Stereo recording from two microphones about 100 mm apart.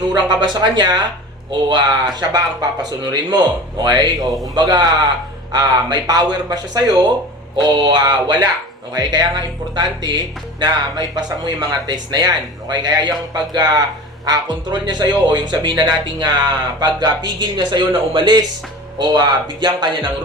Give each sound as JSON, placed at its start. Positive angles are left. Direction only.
{"t": 0.1, "sound": "speech", "side_deg": -45}
{"t": 7.5, "sound": "speech", "side_deg": -55}
{"t": 18.9, "sound": "speech", "side_deg": -45}